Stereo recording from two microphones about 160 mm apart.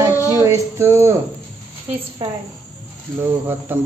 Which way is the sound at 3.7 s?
15° right (ahead or behind).